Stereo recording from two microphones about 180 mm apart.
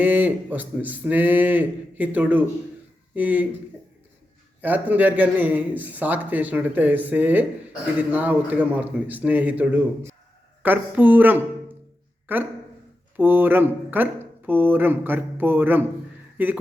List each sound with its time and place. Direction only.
0.0 s a man's voice: 10° right (ahead or behind)
4.6 s a man's voice: 10° right (ahead or behind)